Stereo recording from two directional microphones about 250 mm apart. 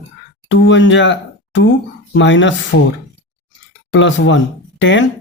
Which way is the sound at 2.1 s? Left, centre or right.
Left.